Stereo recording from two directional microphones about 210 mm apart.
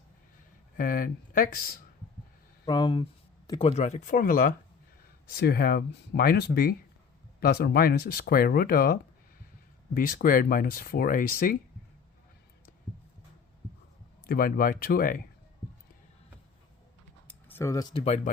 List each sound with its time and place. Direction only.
0.8 s speech: 40° left (ahead or behind)
2.6 s speech: 20° left (ahead or behind); by 11.5 s 45° left (ahead or behind)
14.3 s speech: 45° left (ahead or behind)
17.2 s a sound: 10° left (ahead or behind); by 18.2 s 25° left (ahead or behind)